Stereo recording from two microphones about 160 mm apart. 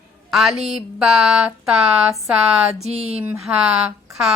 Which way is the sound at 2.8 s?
40° right (ahead or behind).